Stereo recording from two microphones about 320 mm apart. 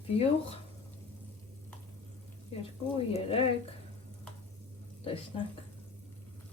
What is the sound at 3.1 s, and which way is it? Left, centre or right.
Speech, centre.